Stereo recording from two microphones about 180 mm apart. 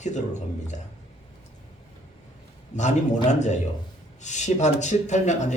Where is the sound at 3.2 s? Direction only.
40° left (ahead or behind).